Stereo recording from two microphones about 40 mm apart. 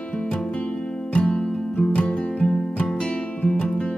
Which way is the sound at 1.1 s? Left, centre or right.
Left.